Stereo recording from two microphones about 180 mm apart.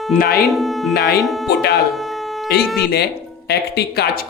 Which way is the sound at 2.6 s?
Centre (ahead or behind).